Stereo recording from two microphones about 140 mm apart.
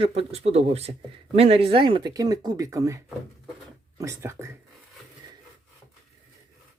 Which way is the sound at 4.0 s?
20° right (ahead or behind).